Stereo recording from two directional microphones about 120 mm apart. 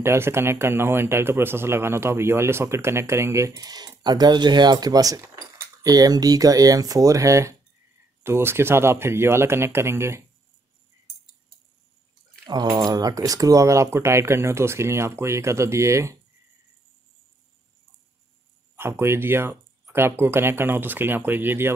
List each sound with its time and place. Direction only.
0.0 s speech: 20° right (ahead or behind)
12.4 s speech: 35° right (ahead or behind)
18.8 s speech: 20° right (ahead or behind)